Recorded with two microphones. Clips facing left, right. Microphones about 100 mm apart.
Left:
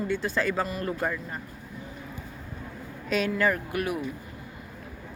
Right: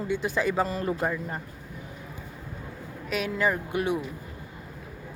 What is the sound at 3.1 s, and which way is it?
Speech, 5° right (ahead or behind).